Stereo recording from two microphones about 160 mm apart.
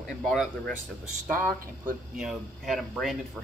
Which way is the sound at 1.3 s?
55° right (ahead or behind).